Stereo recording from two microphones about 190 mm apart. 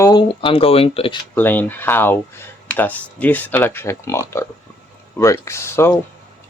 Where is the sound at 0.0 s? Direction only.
20° left (ahead or behind).